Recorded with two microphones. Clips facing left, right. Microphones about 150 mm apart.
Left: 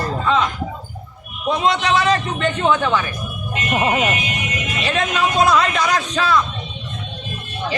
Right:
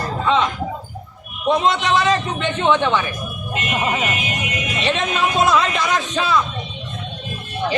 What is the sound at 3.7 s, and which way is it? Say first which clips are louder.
Speech: left 4 dB; 45° left (ahead or behind).